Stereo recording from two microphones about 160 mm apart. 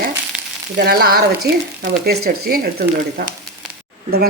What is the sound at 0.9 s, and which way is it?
A woman's voice, 70° right (ahead or behind).